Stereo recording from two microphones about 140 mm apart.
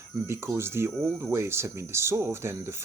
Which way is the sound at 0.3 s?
15° right (ahead or behind).